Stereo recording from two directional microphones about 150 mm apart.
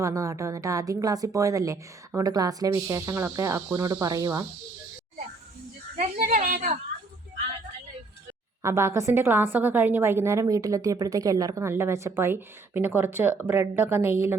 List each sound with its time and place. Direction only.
0.0 s a woman's voice: 20° right (ahead or behind)
6.1 s a woman's voice: 70° right (ahead or behind)
8.6 s a woman's voice: 20° right (ahead or behind)